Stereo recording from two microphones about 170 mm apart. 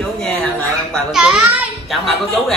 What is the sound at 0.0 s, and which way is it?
A child's voice, 5° left (ahead or behind).